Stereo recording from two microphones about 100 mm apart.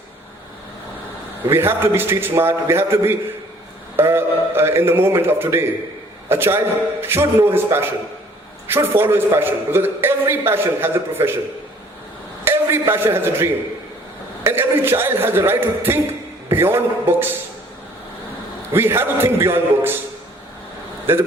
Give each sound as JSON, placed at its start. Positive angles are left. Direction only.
{"t": 1.5, "sound": "a man's voice", "side_deg": -25}
{"t": 12.5, "sound": "a man's voice", "side_deg": -25}
{"t": 18.7, "sound": "a man's voice", "side_deg": -25}
{"t": 21.1, "sound": "a man's voice", "side_deg": -20}